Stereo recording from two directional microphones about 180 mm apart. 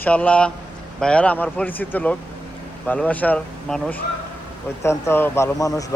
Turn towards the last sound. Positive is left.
turn(degrees=20)  # may be behind; listen again after turning